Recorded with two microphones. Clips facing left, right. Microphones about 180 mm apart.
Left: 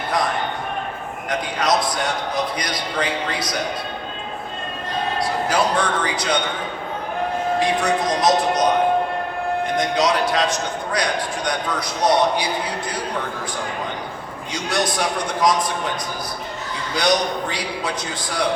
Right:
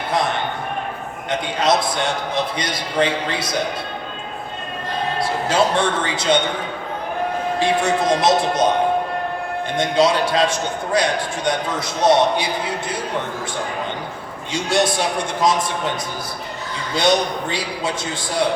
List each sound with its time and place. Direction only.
1.3 s a man's voice: 25° right (ahead or behind)
5.2 s a man's voice: 25° right (ahead or behind)
7.6 s a man's voice: 25° right (ahead or behind)
9.7 s a man's voice: 30° right (ahead or behind)
14.5 s a man's voice: 25° right (ahead or behind)
16.9 s a man's voice: 25° right (ahead or behind)